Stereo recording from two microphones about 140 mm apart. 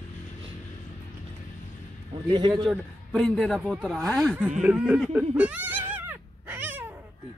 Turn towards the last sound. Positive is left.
turn(degrees=-15)  # may be behind; listen again after turning